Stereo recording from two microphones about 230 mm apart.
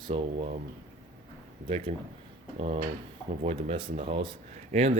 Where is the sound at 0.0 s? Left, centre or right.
Right.